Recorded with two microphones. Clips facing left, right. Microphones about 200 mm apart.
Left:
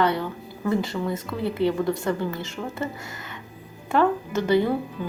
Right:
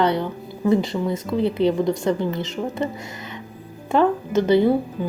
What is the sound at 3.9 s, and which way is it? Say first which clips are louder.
Music: right 3 dB; 20° right (ahead or behind).